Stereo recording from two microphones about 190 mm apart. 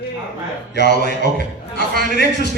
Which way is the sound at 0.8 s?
60° left (ahead or behind).